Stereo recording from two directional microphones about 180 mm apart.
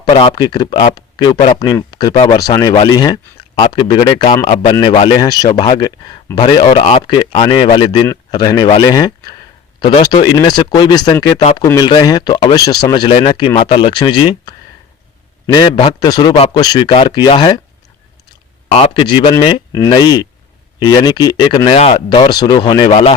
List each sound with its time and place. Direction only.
0.0 s a man's voice: 25° left (ahead or behind)
4.9 s speech: 25° left (ahead or behind)
18.7 s speech: 30° left (ahead or behind)
19.7 s speech: 20° left (ahead or behind)